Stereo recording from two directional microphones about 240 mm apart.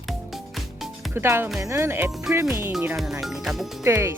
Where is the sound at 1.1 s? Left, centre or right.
Centre.